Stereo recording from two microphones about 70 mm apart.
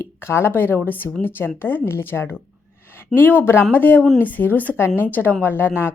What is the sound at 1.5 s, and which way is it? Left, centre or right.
A woman's voice, left.